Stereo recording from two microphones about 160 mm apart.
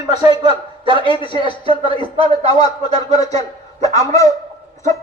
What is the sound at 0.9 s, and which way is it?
A man's voice, 35° left (ahead or behind).